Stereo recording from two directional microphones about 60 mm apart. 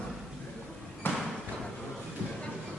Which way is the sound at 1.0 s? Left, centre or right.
Left.